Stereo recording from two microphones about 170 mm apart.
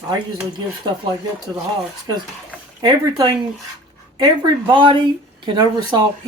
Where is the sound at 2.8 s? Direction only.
25° right (ahead or behind).